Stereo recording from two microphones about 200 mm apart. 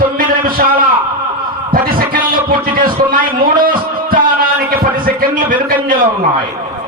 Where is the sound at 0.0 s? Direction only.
45° right (ahead or behind).